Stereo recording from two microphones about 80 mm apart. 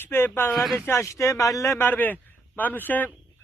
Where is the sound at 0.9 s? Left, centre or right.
Left.